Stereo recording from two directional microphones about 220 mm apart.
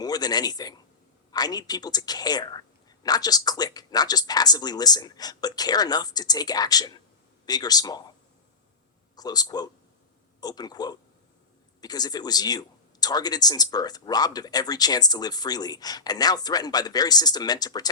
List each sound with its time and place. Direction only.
0.0 s a sound: 15° left (ahead or behind)
1.3 s speech: 20° left (ahead or behind)
9.1 s speech: 15° left (ahead or behind)